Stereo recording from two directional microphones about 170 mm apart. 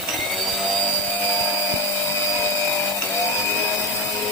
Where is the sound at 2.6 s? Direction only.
20° left (ahead or behind).